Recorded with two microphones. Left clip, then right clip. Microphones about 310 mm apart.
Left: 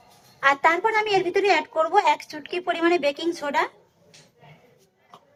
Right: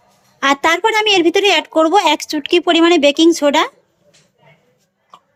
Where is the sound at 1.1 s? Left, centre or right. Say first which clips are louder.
Right 8 dB; right.